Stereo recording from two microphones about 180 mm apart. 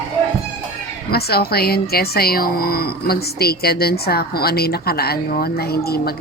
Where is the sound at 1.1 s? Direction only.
60° left (ahead or behind).